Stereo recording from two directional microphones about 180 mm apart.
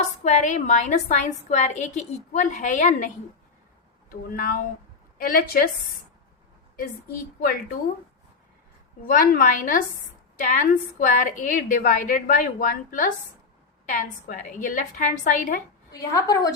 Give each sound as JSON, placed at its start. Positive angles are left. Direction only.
{"t": 0.3, "sound": "a woman's voice", "side_deg": 45}
{"t": 4.1, "sound": "a woman's voice", "side_deg": 55}
{"t": 9.0, "sound": "a woman's voice", "side_deg": 50}
{"t": 15.9, "sound": "a woman's voice", "side_deg": 20}